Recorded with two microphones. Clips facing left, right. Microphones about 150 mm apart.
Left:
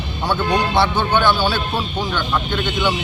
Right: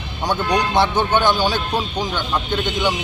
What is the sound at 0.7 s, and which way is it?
A man's voice, 20° right (ahead or behind).